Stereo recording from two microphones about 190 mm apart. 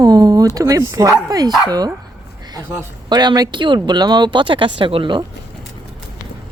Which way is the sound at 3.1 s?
20° right (ahead or behind).